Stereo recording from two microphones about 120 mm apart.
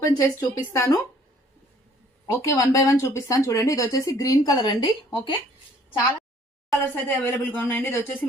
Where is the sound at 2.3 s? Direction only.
25° left (ahead or behind).